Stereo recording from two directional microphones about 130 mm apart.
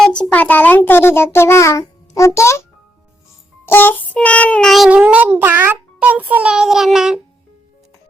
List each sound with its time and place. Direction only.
0.0 s a child's voice: 10° left (ahead or behind)
3.7 s child singing: 15° left (ahead or behind); by 7.2 s 5° right (ahead or behind)